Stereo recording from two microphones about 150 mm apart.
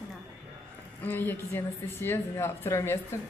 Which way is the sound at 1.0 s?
10° left (ahead or behind).